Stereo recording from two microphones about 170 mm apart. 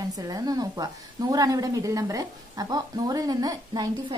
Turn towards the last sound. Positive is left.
turn(degrees=-20)  # may be behind; listen again after turning